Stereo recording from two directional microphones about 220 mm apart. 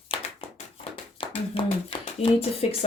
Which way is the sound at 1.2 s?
25° left (ahead or behind).